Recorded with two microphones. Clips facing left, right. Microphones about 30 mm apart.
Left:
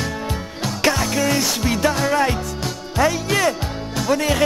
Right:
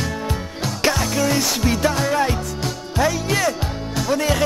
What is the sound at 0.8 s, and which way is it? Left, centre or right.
Music, centre.